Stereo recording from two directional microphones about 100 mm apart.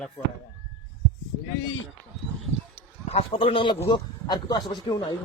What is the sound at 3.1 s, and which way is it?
Speech, 65° left (ahead or behind).